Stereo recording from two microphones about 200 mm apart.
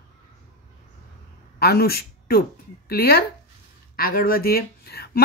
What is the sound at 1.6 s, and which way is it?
Speech, 50° left (ahead or behind).